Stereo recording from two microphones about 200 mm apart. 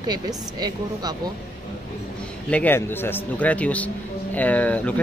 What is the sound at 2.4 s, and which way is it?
A man's voice, 10° left (ahead or behind).